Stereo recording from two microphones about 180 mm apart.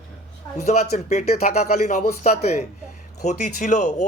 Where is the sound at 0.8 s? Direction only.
40° left (ahead or behind).